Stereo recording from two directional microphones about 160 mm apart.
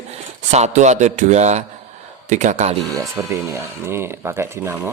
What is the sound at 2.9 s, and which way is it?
Speech, 20° right (ahead or behind).